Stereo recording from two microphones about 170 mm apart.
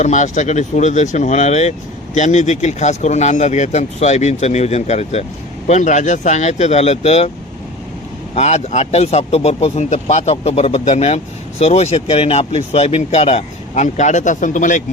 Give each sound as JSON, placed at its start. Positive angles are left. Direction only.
{"t": 0.0, "sound": "speech", "side_deg": 45}
{"t": 8.4, "sound": "speech", "side_deg": 40}